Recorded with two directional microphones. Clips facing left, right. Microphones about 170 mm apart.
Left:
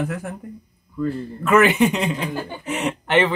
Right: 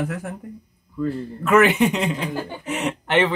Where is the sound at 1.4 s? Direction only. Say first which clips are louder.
Even; centre (ahead or behind).